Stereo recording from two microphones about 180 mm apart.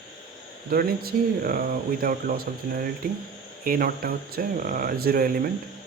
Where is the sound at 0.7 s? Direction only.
55° right (ahead or behind).